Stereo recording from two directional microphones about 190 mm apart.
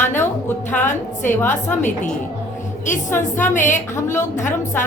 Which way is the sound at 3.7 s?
15° left (ahead or behind).